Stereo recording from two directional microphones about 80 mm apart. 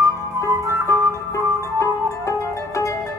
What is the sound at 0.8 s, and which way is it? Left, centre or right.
Music, left.